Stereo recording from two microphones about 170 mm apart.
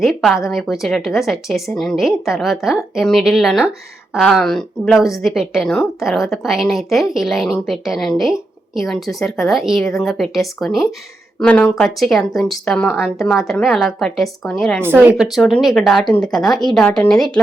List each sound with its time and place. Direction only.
0.0 s a woman's voice: centre (ahead or behind)
14.8 s a woman's voice: 10° right (ahead or behind); by 17.4 s 5° left (ahead or behind)